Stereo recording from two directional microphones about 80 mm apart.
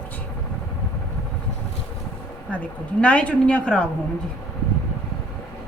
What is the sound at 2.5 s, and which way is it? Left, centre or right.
A woman's voice, centre.